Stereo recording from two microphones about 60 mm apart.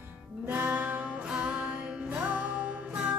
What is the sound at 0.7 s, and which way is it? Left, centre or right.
Music, right.